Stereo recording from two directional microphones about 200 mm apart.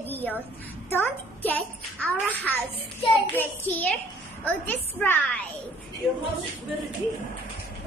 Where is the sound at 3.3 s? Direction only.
10° left (ahead or behind).